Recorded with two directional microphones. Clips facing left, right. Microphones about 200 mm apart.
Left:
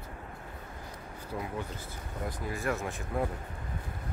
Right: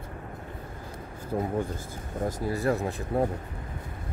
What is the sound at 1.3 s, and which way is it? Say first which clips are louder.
Speech: right 8 dB; 50° right (ahead or behind).